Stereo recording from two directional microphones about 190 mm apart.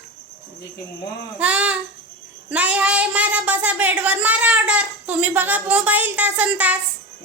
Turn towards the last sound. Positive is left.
turn(degrees=-10)  # may be behind; listen again after turning